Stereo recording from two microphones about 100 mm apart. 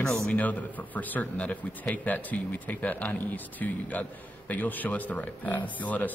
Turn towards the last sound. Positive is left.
turn(degrees=15)  # may be behind; listen again after turning